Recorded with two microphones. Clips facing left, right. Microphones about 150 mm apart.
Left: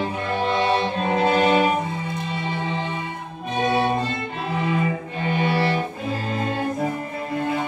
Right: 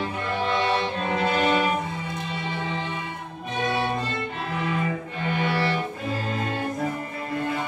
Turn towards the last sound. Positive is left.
turn(degrees=20)  # may be behind; listen again after turning